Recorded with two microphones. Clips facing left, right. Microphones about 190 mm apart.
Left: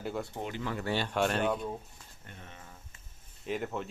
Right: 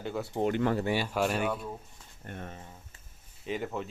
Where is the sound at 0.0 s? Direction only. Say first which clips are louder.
Right 1 dB; centre (ahead or behind).